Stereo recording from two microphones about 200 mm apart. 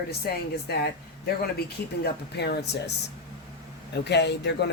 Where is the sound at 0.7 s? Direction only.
50° left (ahead or behind).